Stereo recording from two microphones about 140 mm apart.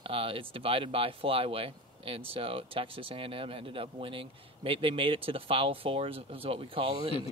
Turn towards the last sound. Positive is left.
turn(degrees=-45)  # may be behind; listen again after turning